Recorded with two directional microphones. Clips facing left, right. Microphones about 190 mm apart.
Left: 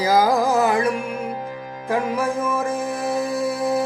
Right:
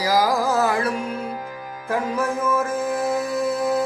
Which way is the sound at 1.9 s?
15° left (ahead or behind).